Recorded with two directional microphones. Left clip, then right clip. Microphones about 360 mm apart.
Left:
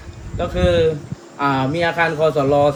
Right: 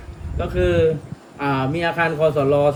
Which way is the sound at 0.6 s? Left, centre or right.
Centre.